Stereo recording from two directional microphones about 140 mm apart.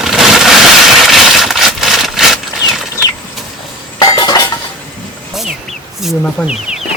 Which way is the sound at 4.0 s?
30° left (ahead or behind).